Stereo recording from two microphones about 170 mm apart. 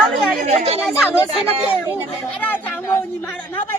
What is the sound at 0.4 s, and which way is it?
Speech, 35° right (ahead or behind).